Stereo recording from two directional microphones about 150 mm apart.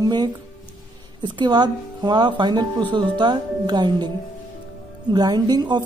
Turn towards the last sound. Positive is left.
turn(degrees=-30)  # may be behind; listen again after turning